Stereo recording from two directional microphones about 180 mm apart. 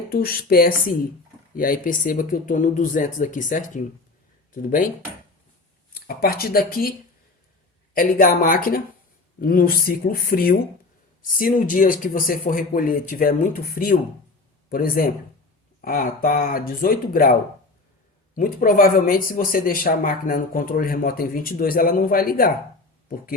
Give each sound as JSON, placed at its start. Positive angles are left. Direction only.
{"t": 0.1, "sound": "speech", "side_deg": 55}
{"t": 6.1, "sound": "speech", "side_deg": 55}
{"t": 7.9, "sound": "speech", "side_deg": 50}
{"t": 18.3, "sound": "speech", "side_deg": 50}